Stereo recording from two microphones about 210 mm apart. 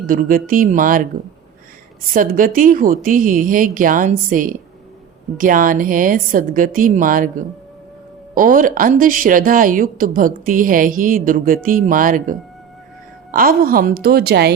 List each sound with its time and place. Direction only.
0.0 s a woman's voice: 40° right (ahead or behind)
2.1 s a woman's voice: 40° right (ahead or behind)